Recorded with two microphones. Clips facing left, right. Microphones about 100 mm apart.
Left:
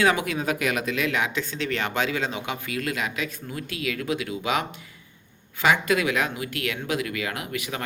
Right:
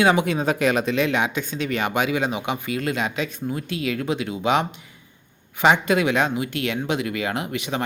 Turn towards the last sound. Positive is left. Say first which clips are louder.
# right 5 dB
turn(degrees=-25)  # may be behind; listen again after turning